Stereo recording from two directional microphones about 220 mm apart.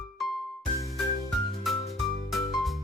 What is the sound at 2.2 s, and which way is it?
Music, centre (ahead or behind).